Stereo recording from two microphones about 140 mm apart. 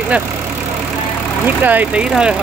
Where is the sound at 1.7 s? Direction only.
10° right (ahead or behind).